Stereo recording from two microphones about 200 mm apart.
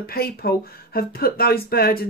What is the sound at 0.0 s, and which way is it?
Speech, 50° left (ahead or behind).